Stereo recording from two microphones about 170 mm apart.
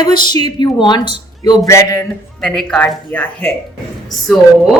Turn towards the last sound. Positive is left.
turn(degrees=0)  # may be behind; listen again after turning